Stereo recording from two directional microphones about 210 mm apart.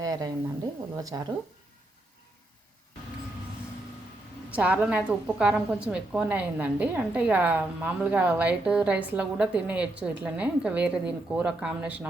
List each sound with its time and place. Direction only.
0.0 s a sound: 15° right (ahead or behind)
0.9 s a woman's voice: 15° right (ahead or behind)
4.5 s a woman's voice: 5° right (ahead or behind)